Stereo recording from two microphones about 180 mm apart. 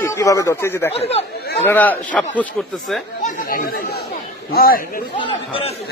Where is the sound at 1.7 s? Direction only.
10° left (ahead or behind).